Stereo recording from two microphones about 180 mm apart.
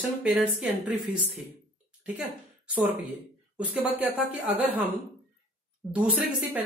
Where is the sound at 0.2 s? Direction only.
5° right (ahead or behind).